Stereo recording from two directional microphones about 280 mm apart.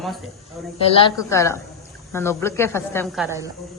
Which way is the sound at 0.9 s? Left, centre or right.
Centre.